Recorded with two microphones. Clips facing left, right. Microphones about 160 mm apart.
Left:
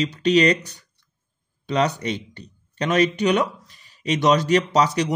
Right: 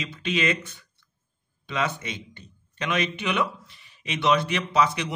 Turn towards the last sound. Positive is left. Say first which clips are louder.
# left 5 dB
turn(degrees=40)  # may be behind; listen again after turning